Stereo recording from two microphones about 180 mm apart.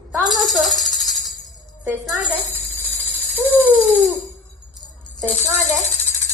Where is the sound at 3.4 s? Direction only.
10° right (ahead or behind).